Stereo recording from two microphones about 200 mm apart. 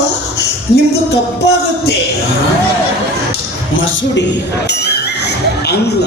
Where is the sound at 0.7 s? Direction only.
30° left (ahead or behind).